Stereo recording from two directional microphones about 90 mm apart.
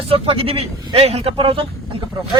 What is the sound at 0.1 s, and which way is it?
Speech, 90° right.